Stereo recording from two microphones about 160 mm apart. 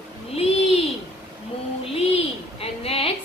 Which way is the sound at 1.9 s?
40° left (ahead or behind).